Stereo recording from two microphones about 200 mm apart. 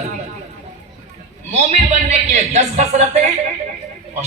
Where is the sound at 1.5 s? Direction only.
35° right (ahead or behind).